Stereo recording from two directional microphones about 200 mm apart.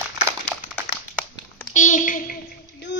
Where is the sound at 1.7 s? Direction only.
40° left (ahead or behind).